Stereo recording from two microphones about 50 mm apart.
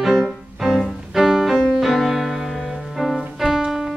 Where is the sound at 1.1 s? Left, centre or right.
Centre.